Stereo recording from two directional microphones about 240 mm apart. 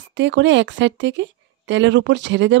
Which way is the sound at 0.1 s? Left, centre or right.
Right.